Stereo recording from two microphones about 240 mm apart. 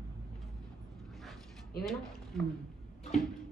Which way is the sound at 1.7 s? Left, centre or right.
Left.